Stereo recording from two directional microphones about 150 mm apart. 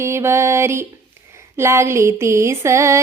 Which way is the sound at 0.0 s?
15° right (ahead or behind).